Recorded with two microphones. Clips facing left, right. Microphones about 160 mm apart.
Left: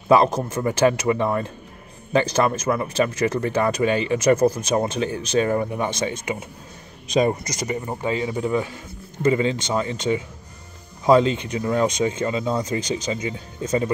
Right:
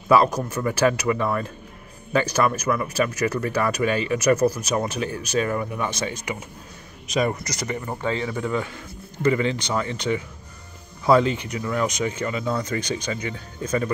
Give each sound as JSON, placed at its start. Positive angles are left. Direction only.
{"t": 0.1, "sound": "speech", "side_deg": 25}